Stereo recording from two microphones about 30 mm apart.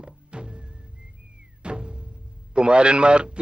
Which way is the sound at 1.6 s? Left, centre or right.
Right.